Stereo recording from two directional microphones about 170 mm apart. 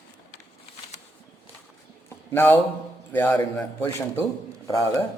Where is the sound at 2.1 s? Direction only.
15° left (ahead or behind).